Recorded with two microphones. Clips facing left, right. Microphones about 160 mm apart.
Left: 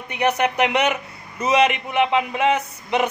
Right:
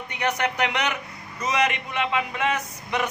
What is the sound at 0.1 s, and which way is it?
A man's voice, 20° left (ahead or behind).